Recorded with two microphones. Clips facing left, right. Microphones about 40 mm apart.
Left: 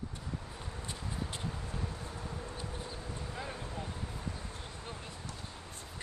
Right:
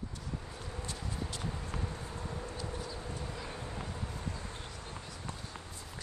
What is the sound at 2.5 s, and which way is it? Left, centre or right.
Clip-clop, left.